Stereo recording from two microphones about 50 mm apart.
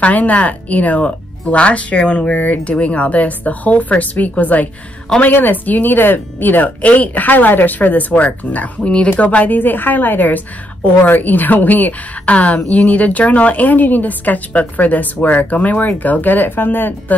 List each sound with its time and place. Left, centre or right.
0.0 s speech: left